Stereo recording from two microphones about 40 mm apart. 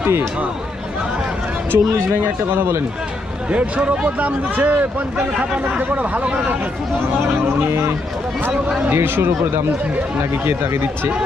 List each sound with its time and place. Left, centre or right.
0.0 s speech: right
1.7 s speech: right
2.5 s speech: right
3.5 s speech: right
6.2 s speech: right
7.7 s speech: right
8.9 s speech: right
10.4 s speech: right